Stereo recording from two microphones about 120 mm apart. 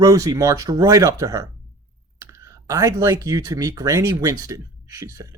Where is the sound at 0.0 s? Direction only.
30° right (ahead or behind).